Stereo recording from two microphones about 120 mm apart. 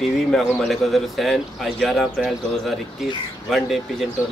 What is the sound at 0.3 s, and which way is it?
Speech, 5° left (ahead or behind).